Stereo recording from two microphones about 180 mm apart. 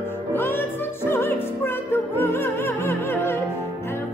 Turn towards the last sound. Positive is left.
turn(degrees=15)  # may be behind; listen again after turning